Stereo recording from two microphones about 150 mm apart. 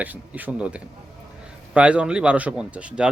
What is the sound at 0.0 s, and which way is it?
Speech, 10° right (ahead or behind).